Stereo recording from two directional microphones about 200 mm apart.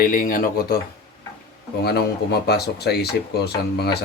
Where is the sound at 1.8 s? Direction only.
55° left (ahead or behind).